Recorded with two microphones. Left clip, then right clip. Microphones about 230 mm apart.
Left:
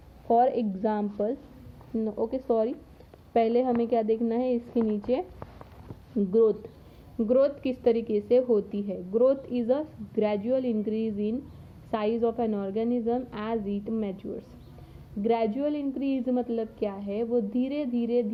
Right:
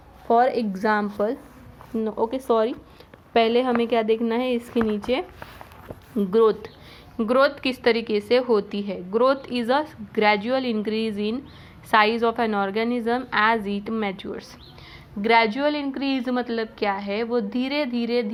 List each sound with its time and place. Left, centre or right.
0.3 s a woman's voice: centre
2.0 s speech: right
2.3 s a woman's voice: centre
6.3 s a woman's voice: centre
15.2 s a woman's voice: centre